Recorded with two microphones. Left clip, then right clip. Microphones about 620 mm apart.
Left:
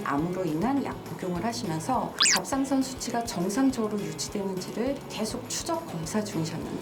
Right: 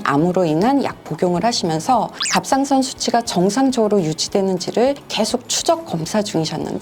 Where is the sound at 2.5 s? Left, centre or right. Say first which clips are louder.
Right 11 dB; right.